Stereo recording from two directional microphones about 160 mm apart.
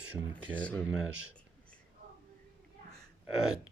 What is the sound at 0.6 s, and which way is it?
Speech, 10° left (ahead or behind).